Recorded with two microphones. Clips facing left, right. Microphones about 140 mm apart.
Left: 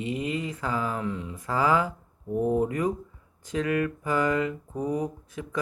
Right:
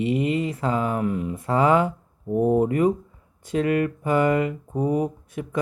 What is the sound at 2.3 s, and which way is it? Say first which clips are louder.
Speech: right 5 dB; 20° right (ahead or behind).